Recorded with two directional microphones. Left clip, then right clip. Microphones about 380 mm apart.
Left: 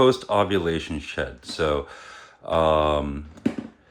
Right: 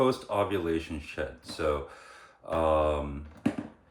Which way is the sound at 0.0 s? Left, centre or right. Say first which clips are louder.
Left 8 dB; left.